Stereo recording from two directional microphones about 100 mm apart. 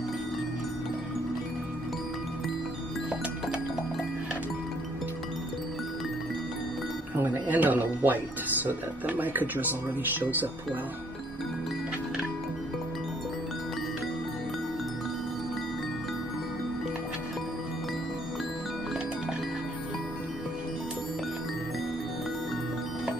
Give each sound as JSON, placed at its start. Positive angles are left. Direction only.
{"t": 7.2, "sound": "speech", "side_deg": -20}